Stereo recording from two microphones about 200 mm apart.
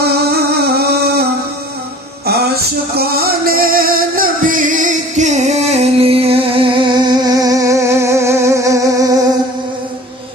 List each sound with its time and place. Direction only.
0.3 s music: 50° right (ahead or behind); by 9.2 s 15° right (ahead or behind)